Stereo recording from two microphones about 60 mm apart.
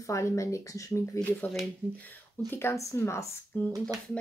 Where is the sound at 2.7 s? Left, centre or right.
Left.